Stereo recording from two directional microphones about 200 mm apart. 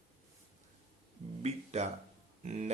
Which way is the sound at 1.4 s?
35° right (ahead or behind).